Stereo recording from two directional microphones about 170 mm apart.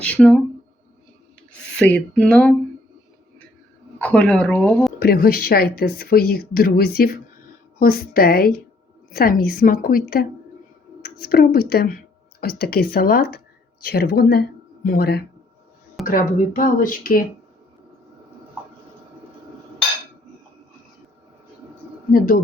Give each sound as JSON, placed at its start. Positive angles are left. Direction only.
{"t": 0.0, "sound": "speech", "side_deg": 5}
{"t": 1.7, "sound": "speech", "side_deg": 5}
{"t": 3.9, "sound": "speech", "side_deg": 5}
{"t": 4.9, "sound": "speech", "side_deg": 65}
{"t": 11.3, "sound": "speech", "side_deg": 65}
{"t": 16.0, "sound": "speech", "side_deg": 55}